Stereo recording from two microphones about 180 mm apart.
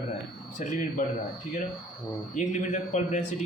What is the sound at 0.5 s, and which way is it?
Speech, 50° left (ahead or behind).